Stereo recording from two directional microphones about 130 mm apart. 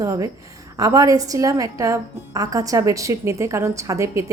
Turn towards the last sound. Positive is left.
turn(degrees=-20)  # may be behind; listen again after turning